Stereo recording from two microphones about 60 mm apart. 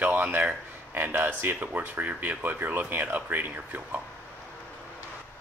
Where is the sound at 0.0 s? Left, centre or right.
Right.